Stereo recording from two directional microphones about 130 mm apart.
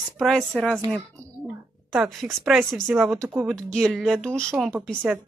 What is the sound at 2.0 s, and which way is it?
Speech, centre (ahead or behind).